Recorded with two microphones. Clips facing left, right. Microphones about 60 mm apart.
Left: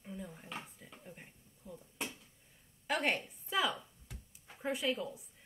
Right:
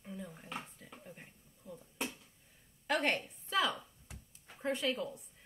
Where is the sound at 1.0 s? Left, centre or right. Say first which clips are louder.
Even; centre.